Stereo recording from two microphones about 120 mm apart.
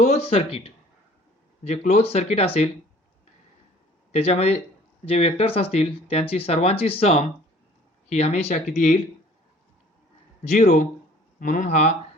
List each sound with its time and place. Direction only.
0.0 s speech: 65° left (ahead or behind)
1.6 s speech: 65° left (ahead or behind)
4.1 s speech: 60° left (ahead or behind); by 9.0 s 85° left
10.5 s speech: 75° left (ahead or behind)
11.3 s speech: 90° left